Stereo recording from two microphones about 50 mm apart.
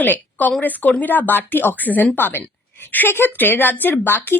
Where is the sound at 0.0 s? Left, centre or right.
Left.